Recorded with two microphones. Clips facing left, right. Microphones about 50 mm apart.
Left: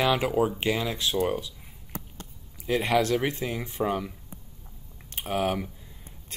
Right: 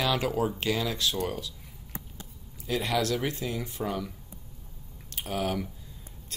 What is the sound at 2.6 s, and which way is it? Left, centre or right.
Speech, left.